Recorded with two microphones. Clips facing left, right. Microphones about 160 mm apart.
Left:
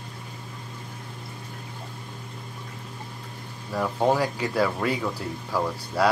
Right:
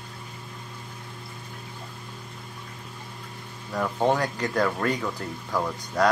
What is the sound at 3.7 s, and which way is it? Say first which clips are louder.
Speech: left 1 dB; 5° left (ahead or behind).